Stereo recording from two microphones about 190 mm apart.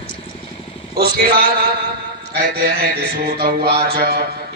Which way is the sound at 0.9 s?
55° right (ahead or behind).